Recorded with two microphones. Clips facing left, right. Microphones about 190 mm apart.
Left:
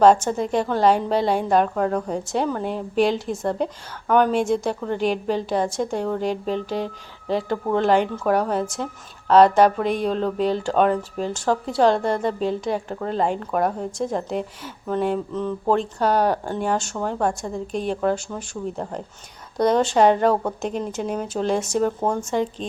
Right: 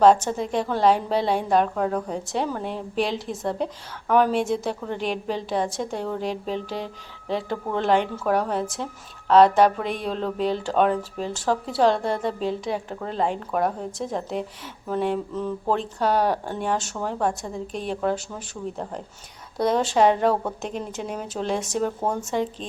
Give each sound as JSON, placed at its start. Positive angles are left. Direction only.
{"t": 0.0, "sound": "speech", "side_deg": 0}